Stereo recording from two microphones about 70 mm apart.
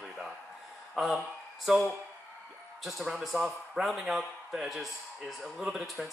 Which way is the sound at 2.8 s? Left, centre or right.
Centre.